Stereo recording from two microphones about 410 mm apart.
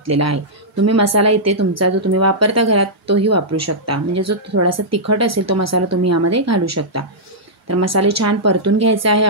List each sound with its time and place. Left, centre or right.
0.0 s speech: right